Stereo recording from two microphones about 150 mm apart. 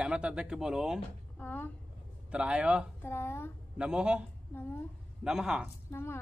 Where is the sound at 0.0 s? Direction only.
5° right (ahead or behind).